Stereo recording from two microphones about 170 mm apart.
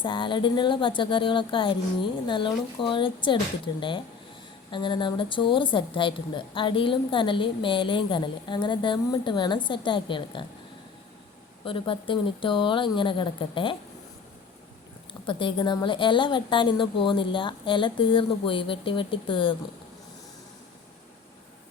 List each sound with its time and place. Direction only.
0.0 s a woman's voice: 30° left (ahead or behind)
11.6 s a woman's voice: 30° left (ahead or behind)
15.3 s a woman's voice: 30° left (ahead or behind)